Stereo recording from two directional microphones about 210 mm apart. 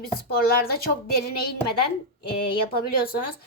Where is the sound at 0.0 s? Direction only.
45° left (ahead or behind).